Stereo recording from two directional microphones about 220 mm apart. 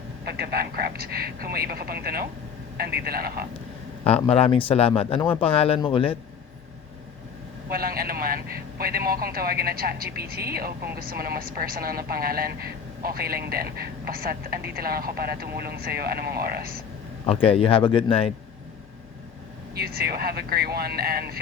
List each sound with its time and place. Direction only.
0.3 s a woman's voice: 45° right (ahead or behind)
4.0 s speech: 30° left (ahead or behind)
7.7 s a woman's voice: 45° right (ahead or behind)
17.2 s speech: 25° left (ahead or behind)
19.7 s a woman's voice: 45° right (ahead or behind)